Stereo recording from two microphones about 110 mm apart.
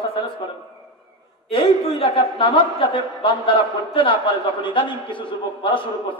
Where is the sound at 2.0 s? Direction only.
55° left (ahead or behind).